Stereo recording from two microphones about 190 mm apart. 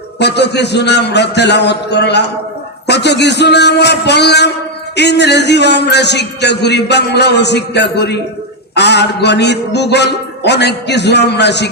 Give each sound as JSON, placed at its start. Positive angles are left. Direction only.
{"t": 0.2, "sound": "a man's voice", "side_deg": 65}